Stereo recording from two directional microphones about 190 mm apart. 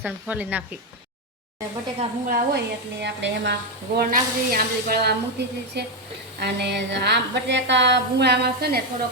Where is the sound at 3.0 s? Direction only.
70° right (ahead or behind).